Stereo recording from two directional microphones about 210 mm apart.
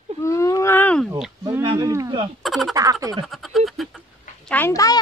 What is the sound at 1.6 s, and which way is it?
Speech, 20° right (ahead or behind).